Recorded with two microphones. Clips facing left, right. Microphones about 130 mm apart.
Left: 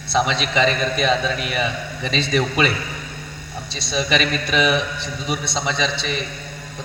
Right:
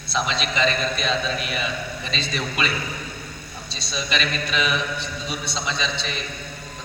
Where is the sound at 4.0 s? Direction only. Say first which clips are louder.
Left 5 dB; 60° left (ahead or behind).